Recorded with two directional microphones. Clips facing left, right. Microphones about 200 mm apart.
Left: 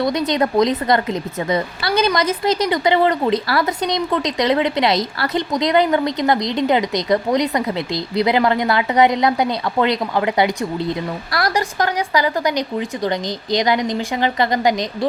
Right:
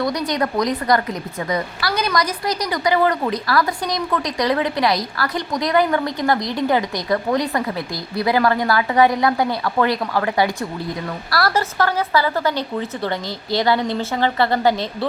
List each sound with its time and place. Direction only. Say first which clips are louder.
0.0 s a woman's voice: left 3 dB; 25° left (ahead or behind)